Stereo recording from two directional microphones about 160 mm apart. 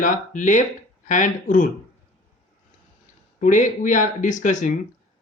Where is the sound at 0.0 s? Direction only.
55° left (ahead or behind).